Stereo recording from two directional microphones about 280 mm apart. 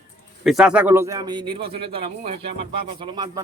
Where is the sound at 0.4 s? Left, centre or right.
Centre.